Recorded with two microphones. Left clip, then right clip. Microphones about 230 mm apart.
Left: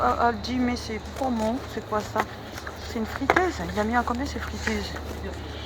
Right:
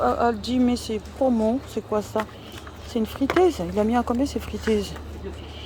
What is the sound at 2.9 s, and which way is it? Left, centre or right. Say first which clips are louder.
Speech: right 2 dB; right.